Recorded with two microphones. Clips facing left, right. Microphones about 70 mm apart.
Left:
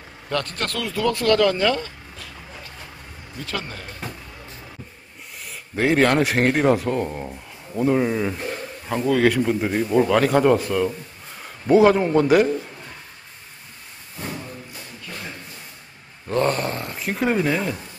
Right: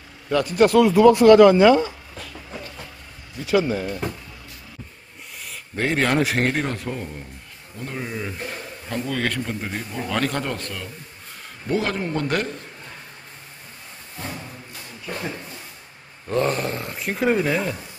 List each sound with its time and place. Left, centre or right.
0.3 s speech: centre
3.4 s speech: centre
4.0 s music: centre
5.4 s a man's voice: centre
7.8 s a man's voice: centre
16.3 s speech: centre